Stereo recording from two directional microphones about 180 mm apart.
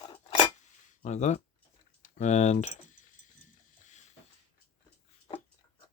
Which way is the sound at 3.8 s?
40° left (ahead or behind).